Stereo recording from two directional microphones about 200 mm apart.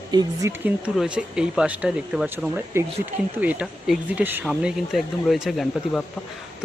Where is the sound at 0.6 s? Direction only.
5° right (ahead or behind).